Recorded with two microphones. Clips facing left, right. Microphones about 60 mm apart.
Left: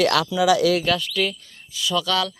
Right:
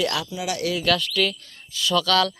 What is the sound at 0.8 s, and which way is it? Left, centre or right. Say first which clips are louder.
Speech: even; centre.